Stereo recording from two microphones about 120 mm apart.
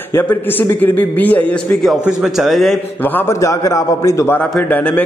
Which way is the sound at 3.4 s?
25° left (ahead or behind).